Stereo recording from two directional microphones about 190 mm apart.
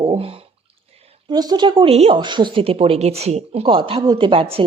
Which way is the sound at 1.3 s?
20° right (ahead or behind).